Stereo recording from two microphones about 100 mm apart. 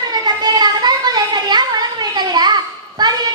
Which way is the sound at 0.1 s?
45° right (ahead or behind).